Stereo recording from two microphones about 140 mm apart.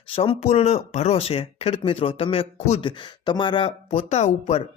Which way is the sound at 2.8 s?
35° left (ahead or behind).